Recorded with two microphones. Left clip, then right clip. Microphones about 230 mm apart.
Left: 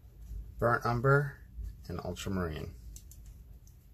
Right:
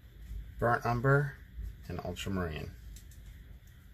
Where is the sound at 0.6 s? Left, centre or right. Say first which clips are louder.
Left 1 dB; centre.